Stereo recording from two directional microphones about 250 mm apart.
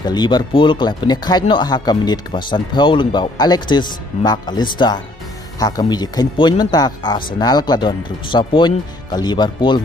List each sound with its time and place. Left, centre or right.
0.0 s speech: centre